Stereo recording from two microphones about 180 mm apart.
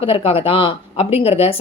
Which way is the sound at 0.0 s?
30° left (ahead or behind).